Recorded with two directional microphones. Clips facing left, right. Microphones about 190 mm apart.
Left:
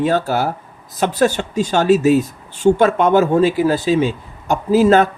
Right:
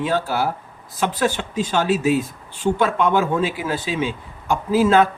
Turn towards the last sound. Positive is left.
turn(degrees=45)  # may be behind; listen again after turning